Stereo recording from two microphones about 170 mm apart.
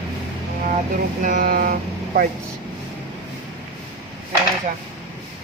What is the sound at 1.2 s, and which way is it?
Speech, 55° right (ahead or behind).